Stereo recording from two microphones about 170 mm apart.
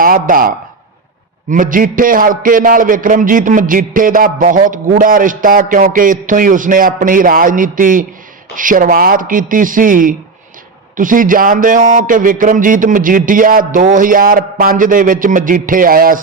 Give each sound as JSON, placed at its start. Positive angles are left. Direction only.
{"t": 0.0, "sound": "a man's voice", "side_deg": -55}